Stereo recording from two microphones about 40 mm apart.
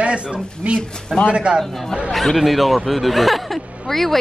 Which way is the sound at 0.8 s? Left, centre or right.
Centre.